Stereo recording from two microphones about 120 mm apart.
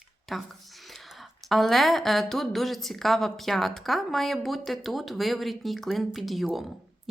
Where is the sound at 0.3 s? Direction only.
Centre (ahead or behind).